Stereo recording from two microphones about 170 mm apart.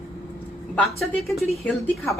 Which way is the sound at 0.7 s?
Centre (ahead or behind).